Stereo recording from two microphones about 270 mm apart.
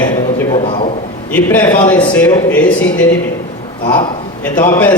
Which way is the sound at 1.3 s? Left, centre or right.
Centre.